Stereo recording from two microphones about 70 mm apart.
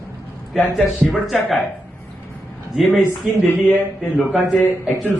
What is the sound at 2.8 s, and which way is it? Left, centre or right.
Speech, left.